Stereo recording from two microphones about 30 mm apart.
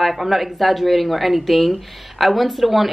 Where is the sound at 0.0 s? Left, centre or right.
Centre.